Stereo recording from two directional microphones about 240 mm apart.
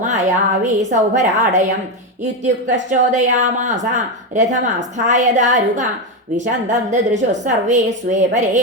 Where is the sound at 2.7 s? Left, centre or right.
Right.